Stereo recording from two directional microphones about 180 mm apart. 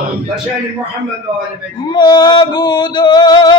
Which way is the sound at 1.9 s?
25° left (ahead or behind).